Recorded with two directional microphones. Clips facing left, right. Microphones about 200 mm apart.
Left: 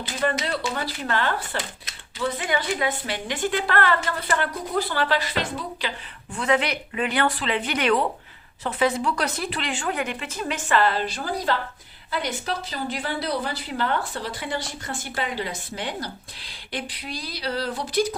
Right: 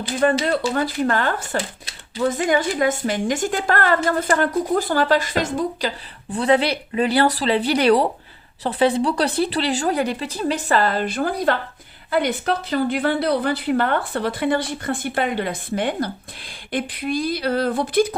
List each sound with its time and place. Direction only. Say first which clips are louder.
0.2 s speech: right 7 dB; 50° right (ahead or behind)
6.3 s a woman's voice: right 5 dB; 35° right (ahead or behind); by 18.1 s 55° right (ahead or behind)